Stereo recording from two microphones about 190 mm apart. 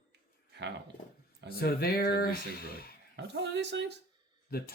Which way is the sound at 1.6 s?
55° left (ahead or behind).